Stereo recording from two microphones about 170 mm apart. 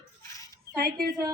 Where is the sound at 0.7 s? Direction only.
65° right (ahead or behind).